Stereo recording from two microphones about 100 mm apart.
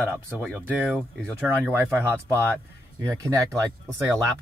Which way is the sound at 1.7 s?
25° right (ahead or behind).